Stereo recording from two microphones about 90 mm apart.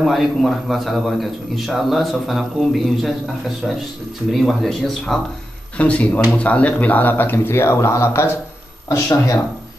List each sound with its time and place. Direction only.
0.0 s a man's voice: centre (ahead or behind)
5.8 s speech: 15° left (ahead or behind); by 9.4 s 35° left (ahead or behind)